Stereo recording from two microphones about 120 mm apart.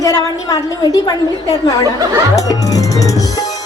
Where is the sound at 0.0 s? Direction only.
30° left (ahead or behind).